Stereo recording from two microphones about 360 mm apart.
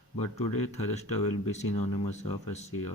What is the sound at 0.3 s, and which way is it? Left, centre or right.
Speech, centre.